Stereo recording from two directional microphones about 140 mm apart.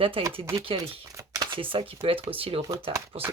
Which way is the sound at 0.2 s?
40° right (ahead or behind).